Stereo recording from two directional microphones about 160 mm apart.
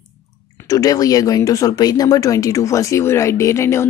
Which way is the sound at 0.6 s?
20° left (ahead or behind).